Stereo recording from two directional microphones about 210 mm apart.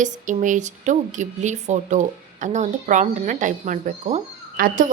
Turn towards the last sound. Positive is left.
turn(degrees=-40)  # may be behind; listen again after turning